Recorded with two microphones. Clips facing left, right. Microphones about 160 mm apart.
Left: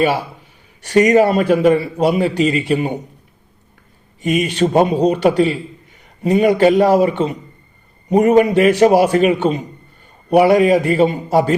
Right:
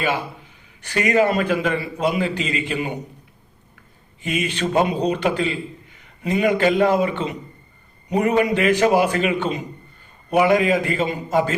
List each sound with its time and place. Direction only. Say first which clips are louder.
0.9 s a man's voice: left 7 dB; 40° left (ahead or behind)
4.2 s a man's voice: left 8 dB; 40° left (ahead or behind)